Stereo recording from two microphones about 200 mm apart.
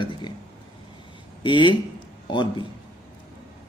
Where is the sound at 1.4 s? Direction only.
25° left (ahead or behind).